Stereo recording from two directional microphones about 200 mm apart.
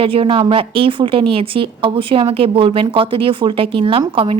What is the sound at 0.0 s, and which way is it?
A woman's voice, 25° right (ahead or behind).